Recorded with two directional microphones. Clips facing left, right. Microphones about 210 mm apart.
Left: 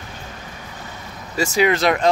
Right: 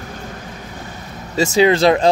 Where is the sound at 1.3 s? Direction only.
25° right (ahead or behind).